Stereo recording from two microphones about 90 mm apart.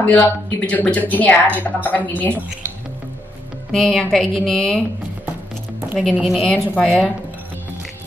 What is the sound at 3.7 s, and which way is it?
A woman's voice, 5° left (ahead or behind).